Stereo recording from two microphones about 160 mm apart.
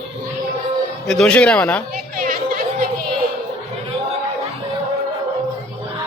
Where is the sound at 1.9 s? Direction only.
60° right (ahead or behind).